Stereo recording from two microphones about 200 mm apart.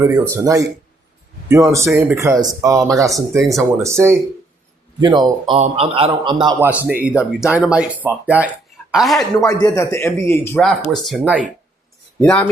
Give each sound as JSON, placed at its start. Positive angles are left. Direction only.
{"t": 0.0, "sound": "a man's voice", "side_deg": -15}
{"t": 6.8, "sound": "speech", "side_deg": -5}
{"t": 9.5, "sound": "a man's voice", "side_deg": 15}